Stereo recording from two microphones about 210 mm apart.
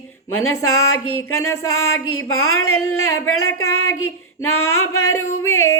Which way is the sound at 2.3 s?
80° left.